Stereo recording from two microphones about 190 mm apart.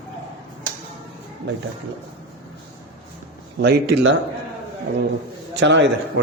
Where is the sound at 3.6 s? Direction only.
65° right (ahead or behind).